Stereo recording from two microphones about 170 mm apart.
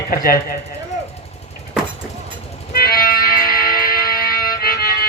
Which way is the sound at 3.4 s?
60° left (ahead or behind).